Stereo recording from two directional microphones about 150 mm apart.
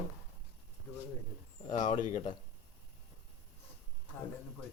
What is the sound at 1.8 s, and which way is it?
Speech, 55° left (ahead or behind).